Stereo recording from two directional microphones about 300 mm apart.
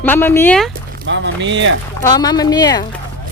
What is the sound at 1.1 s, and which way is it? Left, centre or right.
Speech, right.